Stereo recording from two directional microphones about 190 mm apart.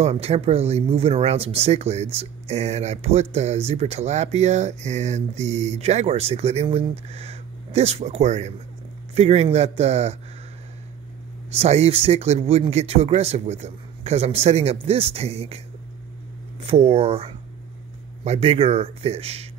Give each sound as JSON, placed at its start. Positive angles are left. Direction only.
{"t": 0.0, "sound": "speech", "side_deg": -35}
{"t": 11.5, "sound": "speech", "side_deg": -35}
{"t": 16.6, "sound": "speech", "side_deg": -30}